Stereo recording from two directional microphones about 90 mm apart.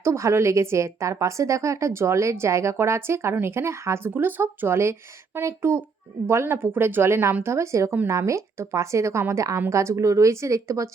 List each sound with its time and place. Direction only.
0.0 s a woman's voice: 35° right (ahead or behind)